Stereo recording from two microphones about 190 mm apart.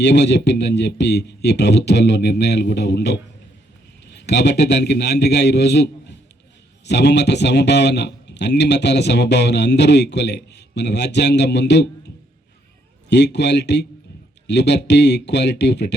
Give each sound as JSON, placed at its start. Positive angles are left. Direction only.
{"t": 0.0, "sound": "a man's voice", "side_deg": 65}
{"t": 13.1, "sound": "a man's voice", "side_deg": 65}